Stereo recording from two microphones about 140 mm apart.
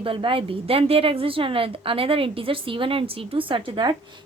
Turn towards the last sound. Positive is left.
turn(degrees=-35)  # may be behind; listen again after turning